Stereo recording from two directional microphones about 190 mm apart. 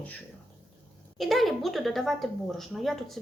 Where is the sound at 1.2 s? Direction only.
Centre (ahead or behind).